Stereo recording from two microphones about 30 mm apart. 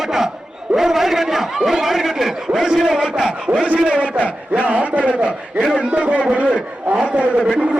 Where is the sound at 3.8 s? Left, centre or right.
Right.